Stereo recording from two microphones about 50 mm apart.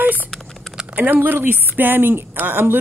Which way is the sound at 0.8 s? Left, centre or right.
Right.